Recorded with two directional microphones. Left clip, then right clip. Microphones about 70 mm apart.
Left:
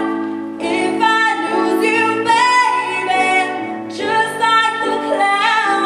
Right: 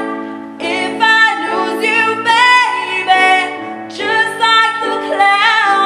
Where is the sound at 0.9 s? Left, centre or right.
Right.